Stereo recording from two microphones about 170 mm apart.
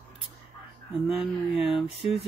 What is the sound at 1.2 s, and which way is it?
Speech, centre (ahead or behind).